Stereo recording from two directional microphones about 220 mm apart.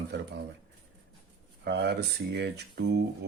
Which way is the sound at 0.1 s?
50° right (ahead or behind).